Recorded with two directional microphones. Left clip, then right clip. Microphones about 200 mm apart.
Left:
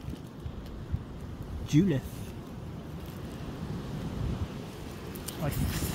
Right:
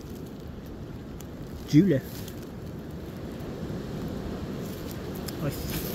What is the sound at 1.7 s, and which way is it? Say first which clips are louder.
Speech: right 6 dB; 5° left (ahead or behind).